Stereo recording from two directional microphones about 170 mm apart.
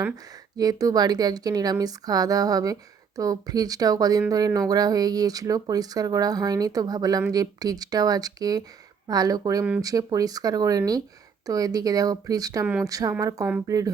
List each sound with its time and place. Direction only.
0.5 s speech: 20° right (ahead or behind)